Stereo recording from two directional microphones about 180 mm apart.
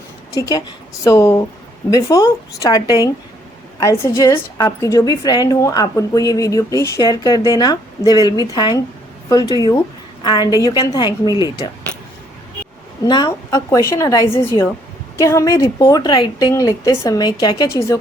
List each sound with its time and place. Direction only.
0.3 s a woman's voice: 20° left (ahead or behind)
13.1 s a woman's voice: 20° left (ahead or behind)